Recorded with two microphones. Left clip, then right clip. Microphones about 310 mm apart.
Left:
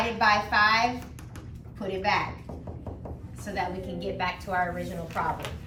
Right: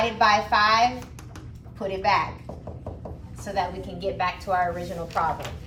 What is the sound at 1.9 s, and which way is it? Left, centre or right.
Speech, centre.